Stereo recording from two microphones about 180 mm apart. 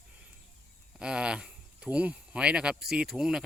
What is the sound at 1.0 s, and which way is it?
Speech, 5° right (ahead or behind).